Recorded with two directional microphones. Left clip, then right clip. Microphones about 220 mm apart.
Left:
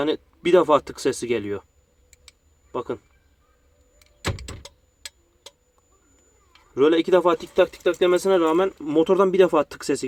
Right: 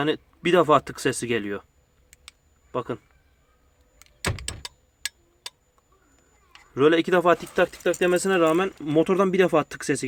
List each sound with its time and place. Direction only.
0.0 s speech: 30° right (ahead or behind)
2.7 s speech: 30° right (ahead or behind)
6.7 s speech: 30° right (ahead or behind)